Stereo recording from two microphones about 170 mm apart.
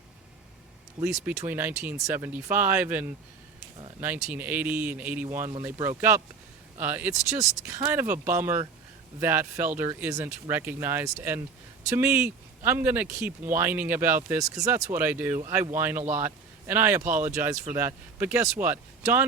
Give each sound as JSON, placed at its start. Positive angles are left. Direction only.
{"t": 1.0, "sound": "speech", "side_deg": -15}